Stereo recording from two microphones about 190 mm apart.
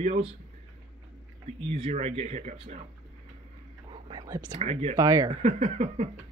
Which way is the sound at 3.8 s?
20° right (ahead or behind).